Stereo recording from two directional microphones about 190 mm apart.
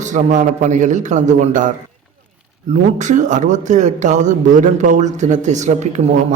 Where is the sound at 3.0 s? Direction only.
40° right (ahead or behind).